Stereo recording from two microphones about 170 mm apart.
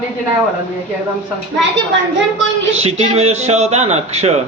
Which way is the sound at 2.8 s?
35° right (ahead or behind).